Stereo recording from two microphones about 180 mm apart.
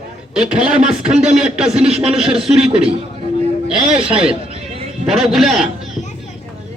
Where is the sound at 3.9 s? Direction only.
30° right (ahead or behind).